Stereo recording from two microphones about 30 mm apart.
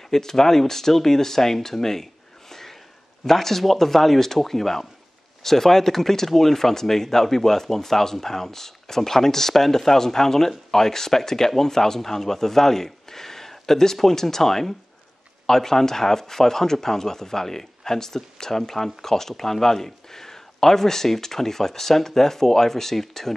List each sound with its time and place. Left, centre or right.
0.1 s speech: centre
2.5 s a sound: centre
3.3 s speech: centre